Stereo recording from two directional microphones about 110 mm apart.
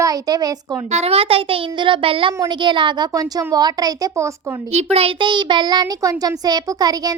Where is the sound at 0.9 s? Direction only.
80° right; by 3.1 s 45° right (ahead or behind).